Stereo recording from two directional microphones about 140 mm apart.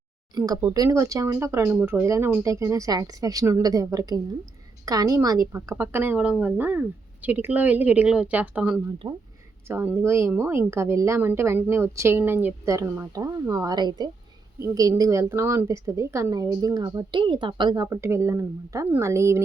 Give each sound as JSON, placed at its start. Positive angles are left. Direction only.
{"t": 0.3, "sound": "a woman's voice", "side_deg": -25}
{"t": 17.8, "sound": "a woman's voice", "side_deg": -20}